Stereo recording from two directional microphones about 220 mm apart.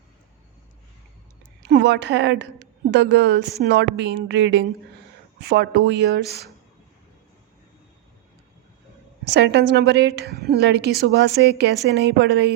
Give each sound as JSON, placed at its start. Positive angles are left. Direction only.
{"t": 1.6, "sound": "a woman's voice", "side_deg": -50}
{"t": 9.2, "sound": "a woman's voice", "side_deg": -50}